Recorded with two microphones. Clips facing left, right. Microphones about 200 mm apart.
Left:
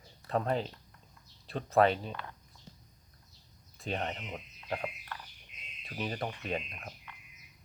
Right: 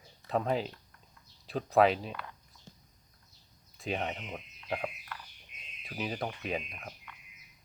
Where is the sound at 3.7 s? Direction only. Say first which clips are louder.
Right 1 dB; centre (ahead or behind).